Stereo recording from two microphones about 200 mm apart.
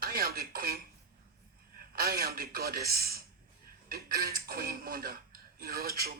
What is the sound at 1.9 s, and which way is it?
Speech, 50° right (ahead or behind).